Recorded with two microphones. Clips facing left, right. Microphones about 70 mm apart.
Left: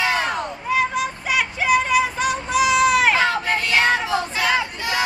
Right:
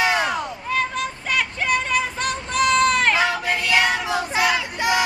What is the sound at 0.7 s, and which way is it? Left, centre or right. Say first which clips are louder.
Child singing: left 4 dB; centre.